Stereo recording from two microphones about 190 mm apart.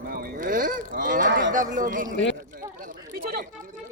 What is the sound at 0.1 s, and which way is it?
Livestock, 50° right (ahead or behind).